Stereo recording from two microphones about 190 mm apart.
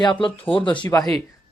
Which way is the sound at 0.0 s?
25° left (ahead or behind).